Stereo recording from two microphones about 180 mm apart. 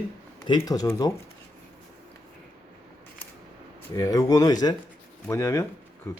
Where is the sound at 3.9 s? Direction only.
20° left (ahead or behind).